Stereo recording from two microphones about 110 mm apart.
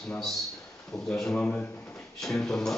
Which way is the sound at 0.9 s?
5° left (ahead or behind).